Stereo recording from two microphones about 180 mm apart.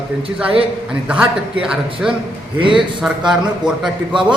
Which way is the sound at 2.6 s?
30° right (ahead or behind).